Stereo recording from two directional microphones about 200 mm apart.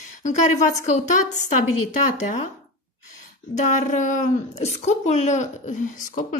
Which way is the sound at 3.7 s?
40° left (ahead or behind).